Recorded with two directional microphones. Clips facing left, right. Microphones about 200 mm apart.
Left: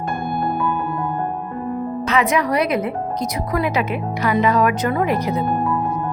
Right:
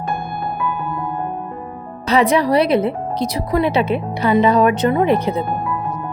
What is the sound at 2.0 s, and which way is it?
Speech, 35° right (ahead or behind).